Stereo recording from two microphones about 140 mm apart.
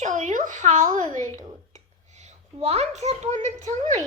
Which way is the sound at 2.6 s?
50° right (ahead or behind).